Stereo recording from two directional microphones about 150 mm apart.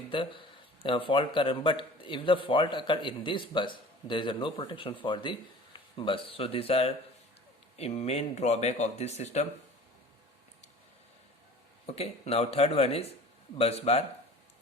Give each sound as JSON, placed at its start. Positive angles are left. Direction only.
{"t": 0.1, "sound": "speech", "side_deg": 35}
{"t": 11.9, "sound": "speech", "side_deg": 40}